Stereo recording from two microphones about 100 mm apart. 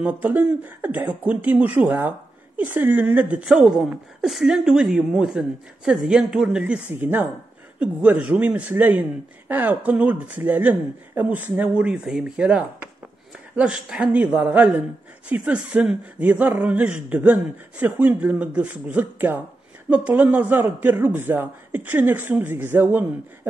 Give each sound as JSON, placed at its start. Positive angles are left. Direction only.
{"t": 0.0, "sound": "speech", "side_deg": -15}
{"t": 4.2, "sound": "speech", "side_deg": -5}
{"t": 6.9, "sound": "speech", "side_deg": -20}